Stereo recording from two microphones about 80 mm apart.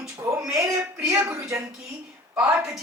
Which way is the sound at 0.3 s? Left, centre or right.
Right.